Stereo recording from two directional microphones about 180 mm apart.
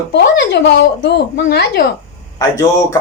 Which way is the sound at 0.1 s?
75° left (ahead or behind).